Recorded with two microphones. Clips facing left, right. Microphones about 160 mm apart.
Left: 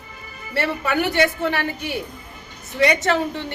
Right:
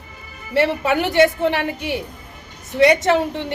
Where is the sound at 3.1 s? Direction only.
20° right (ahead or behind).